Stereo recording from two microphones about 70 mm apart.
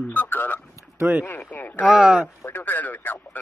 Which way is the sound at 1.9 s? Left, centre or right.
Centre.